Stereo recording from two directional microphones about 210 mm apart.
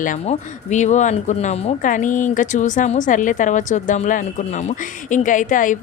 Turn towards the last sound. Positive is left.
turn(degrees=40)  # may be behind; listen again after turning